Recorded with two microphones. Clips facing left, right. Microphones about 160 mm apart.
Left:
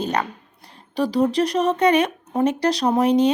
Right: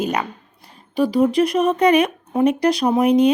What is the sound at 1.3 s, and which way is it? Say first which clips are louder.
Speech: right 3 dB; 35° left (ahead or behind).